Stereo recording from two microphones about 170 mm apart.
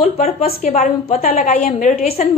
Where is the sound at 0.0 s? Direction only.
40° left (ahead or behind).